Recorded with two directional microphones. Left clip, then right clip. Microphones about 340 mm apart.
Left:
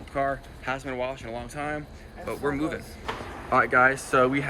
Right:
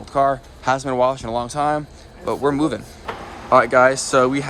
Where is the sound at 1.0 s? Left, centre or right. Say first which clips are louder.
Right 13 dB; centre.